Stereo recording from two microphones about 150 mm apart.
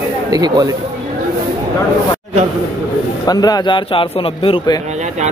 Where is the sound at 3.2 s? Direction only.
25° left (ahead or behind).